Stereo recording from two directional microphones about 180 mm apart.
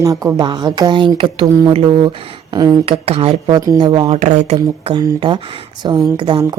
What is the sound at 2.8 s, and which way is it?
A woman's voice, 35° right (ahead or behind).